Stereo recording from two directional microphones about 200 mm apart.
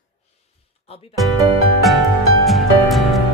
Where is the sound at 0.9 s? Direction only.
30° left (ahead or behind).